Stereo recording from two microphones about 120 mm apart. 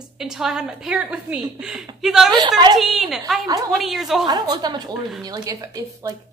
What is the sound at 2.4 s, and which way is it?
Speech, 35° right (ahead or behind).